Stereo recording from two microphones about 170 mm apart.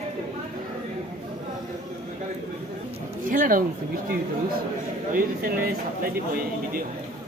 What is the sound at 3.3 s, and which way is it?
Speech, 55° right (ahead or behind).